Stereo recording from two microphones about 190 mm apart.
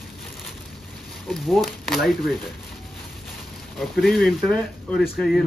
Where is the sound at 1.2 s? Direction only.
Centre (ahead or behind).